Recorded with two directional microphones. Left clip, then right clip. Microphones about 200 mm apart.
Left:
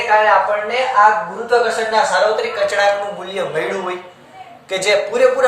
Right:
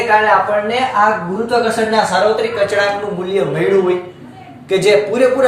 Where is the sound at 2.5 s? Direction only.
10° left (ahead or behind).